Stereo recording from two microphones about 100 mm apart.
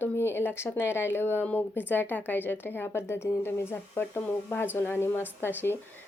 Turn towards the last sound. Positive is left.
turn(degrees=25)  # may be behind; listen again after turning